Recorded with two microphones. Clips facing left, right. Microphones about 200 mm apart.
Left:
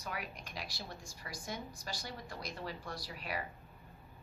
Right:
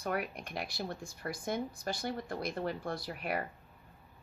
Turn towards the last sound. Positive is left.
turn(degrees=-55)  # may be behind; listen again after turning